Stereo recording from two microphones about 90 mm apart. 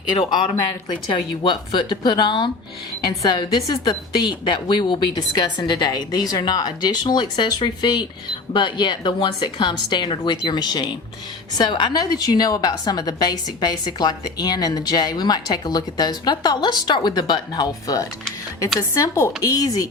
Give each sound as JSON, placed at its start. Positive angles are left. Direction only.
{"t": 0.2, "sound": "speech", "side_deg": 75}
{"t": 1.1, "sound": "a woman's voice", "side_deg": 55}